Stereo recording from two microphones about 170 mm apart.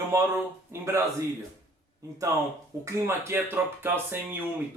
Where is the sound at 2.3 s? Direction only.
15° right (ahead or behind).